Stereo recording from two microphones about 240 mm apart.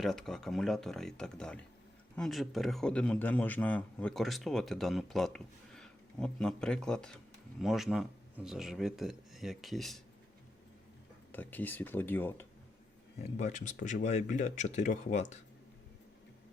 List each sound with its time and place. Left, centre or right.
0.0 s a man's voice: centre
11.3 s speech: centre
13.3 s speech: left